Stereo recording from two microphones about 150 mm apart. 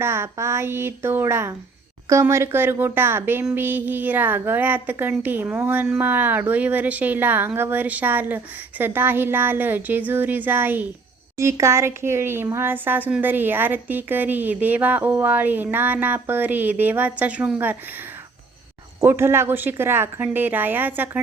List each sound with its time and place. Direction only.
0.0 s a woman's voice: 15° right (ahead or behind)
18.9 s a woman's voice: 15° right (ahead or behind)